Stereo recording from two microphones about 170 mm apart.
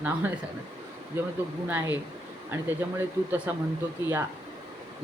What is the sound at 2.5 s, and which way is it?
Speech, 10° right (ahead or behind).